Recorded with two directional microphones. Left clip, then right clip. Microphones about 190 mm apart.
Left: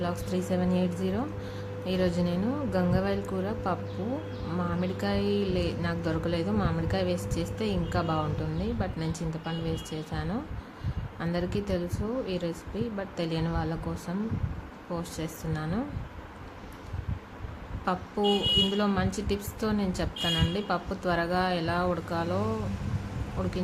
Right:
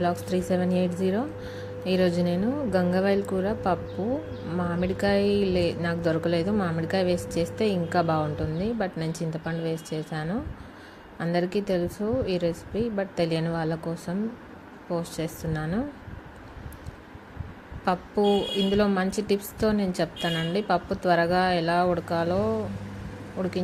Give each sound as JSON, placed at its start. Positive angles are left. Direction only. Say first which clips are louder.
{"t": 0.0, "sound": "speech", "louder": "right 5 dB", "side_deg": -20}
{"t": 17.8, "sound": "speech", "louder": "right 4 dB", "side_deg": -20}